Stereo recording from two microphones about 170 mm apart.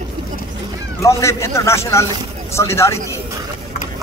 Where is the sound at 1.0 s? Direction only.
15° left (ahead or behind).